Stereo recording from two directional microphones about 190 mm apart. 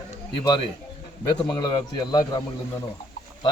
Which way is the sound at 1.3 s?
20° left (ahead or behind).